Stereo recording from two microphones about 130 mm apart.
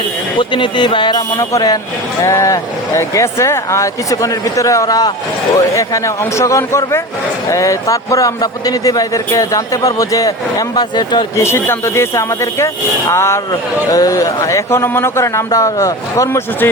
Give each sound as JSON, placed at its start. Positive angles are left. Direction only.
{"t": 0.3, "sound": "speech", "side_deg": 35}
{"t": 1.3, "sound": "speech", "side_deg": 25}
{"t": 11.3, "sound": "speech", "side_deg": 20}